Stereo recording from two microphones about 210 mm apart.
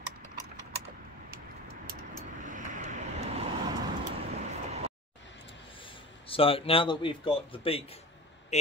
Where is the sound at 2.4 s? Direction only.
35° right (ahead or behind).